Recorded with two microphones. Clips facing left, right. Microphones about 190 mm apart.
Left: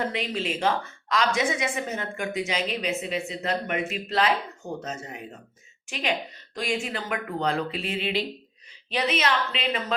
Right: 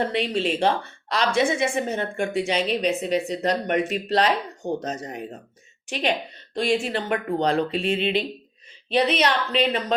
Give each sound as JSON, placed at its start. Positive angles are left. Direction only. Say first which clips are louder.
{"t": 0.0, "sound": "speech", "louder": "right 5 dB", "side_deg": -30}
{"t": 6.5, "sound": "speech", "louder": "right 6 dB", "side_deg": -30}
{"t": 9.0, "sound": "speech", "louder": "right 4 dB", "side_deg": -35}